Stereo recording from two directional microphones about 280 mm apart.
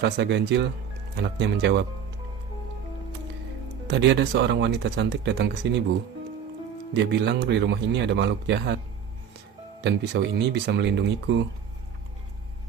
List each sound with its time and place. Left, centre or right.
0.0 s speech: right
3.8 s speech: right
6.9 s speech: right
9.8 s speech: right